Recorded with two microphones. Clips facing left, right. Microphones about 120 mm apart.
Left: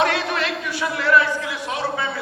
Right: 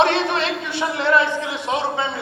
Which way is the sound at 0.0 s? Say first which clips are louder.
Right 3 dB; 25° right (ahead or behind).